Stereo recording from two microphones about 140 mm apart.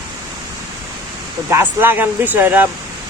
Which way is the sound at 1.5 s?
15° right (ahead or behind).